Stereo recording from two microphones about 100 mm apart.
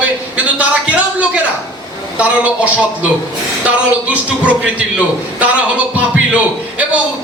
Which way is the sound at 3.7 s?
15° right (ahead or behind).